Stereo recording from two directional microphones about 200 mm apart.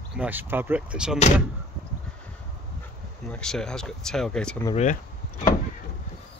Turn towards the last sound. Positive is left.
turn(degrees=35)  # may be behind; listen again after turning